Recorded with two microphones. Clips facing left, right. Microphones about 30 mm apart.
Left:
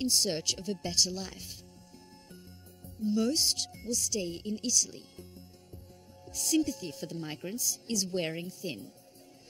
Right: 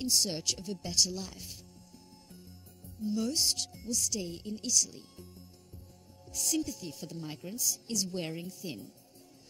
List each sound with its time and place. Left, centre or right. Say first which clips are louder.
0.1 s speech: left 1 dB; left
3.3 s speech: left 1 dB; centre
6.3 s speech: left 4 dB; centre
6.6 s speech: left 5 dB; left